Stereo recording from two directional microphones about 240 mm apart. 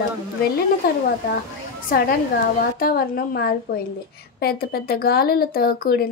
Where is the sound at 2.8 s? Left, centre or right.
Left.